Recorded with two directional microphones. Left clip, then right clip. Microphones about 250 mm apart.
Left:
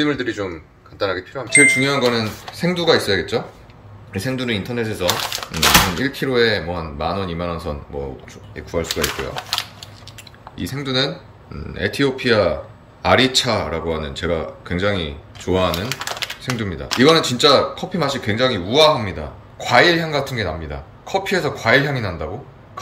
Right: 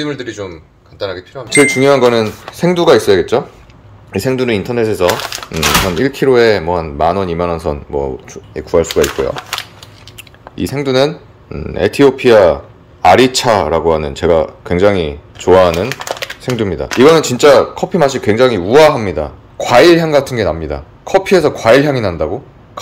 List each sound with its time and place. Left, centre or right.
0.0 s speech: centre
1.5 s speech: right
10.5 s speech: centre